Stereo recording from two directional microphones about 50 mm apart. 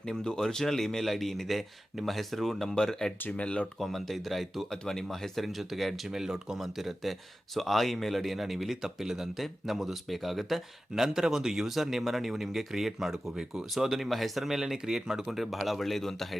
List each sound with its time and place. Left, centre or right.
0.0 s speech: centre
3.3 s speech: left
3.8 s speech: centre